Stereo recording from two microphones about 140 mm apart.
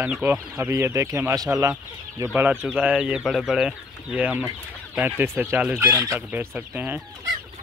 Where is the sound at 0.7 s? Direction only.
20° right (ahead or behind).